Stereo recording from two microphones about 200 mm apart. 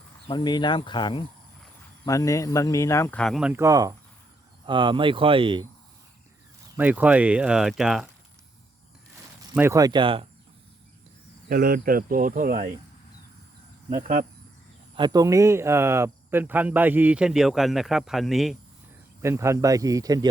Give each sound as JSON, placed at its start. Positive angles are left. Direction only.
{"t": 0.3, "sound": "speech", "side_deg": 20}
{"t": 6.7, "sound": "speech", "side_deg": -5}
{"t": 9.6, "sound": "speech", "side_deg": -15}
{"t": 11.4, "sound": "cricket", "side_deg": -45}
{"t": 14.9, "sound": "speech", "side_deg": -20}
{"t": 19.2, "sound": "speech", "side_deg": -15}